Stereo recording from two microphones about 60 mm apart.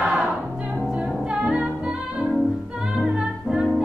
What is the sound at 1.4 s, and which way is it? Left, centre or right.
Music, centre.